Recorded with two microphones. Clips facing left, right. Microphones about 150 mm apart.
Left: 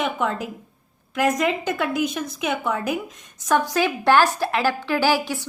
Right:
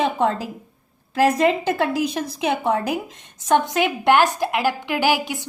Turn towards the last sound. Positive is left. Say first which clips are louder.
# even
turn(degrees=-20)  # may be behind; listen again after turning